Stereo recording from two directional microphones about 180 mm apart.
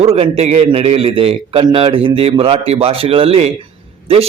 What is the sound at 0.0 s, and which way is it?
A man's voice, 35° right (ahead or behind).